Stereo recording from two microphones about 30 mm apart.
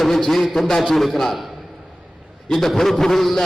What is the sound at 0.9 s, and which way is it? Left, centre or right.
A man's voice, centre.